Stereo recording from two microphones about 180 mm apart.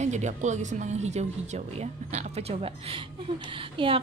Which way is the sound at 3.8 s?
30° right (ahead or behind).